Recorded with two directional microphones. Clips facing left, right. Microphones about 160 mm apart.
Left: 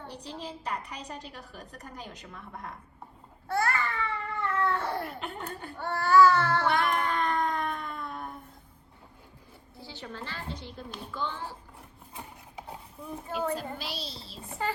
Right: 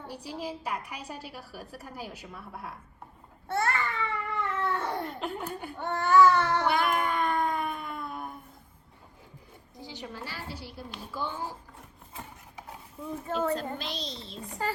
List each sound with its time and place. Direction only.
0.0 s a woman's voice: 10° right (ahead or behind)
3.5 s baby cry: 25° right (ahead or behind)
5.0 s speech: centre (ahead or behind)
5.7 s a woman's voice: 20° right (ahead or behind)
6.7 s a sound: 5° right (ahead or behind)
9.7 s a woman's voice: 15° right (ahead or behind)
13.3 s a woman's voice: 10° left (ahead or behind)